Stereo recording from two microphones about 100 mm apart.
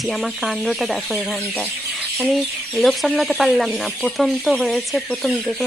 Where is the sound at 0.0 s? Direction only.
Centre (ahead or behind).